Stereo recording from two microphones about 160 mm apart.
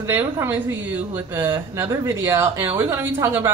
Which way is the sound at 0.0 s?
15° right (ahead or behind).